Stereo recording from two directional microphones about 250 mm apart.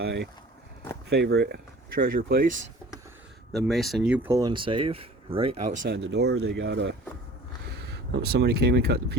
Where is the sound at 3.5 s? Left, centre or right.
Centre; by 6.0 s right.